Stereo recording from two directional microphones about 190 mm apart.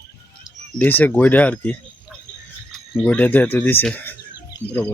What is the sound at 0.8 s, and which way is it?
Speech, 10° left (ahead or behind).